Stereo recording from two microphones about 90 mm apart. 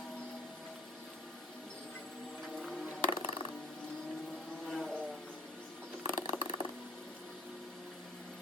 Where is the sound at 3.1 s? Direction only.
75° left (ahead or behind).